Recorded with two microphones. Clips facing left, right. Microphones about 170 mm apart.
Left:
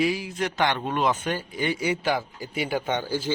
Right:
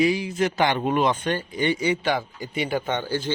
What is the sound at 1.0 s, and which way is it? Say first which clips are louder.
Speech: right 2 dB; 5° left (ahead or behind).